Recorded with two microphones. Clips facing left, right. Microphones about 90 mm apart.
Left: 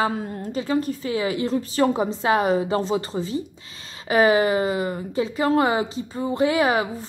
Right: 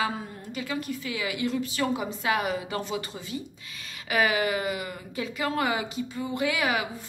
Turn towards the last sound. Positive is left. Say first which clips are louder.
# left 7 dB
turn(degrees=30)  # may be behind; listen again after turning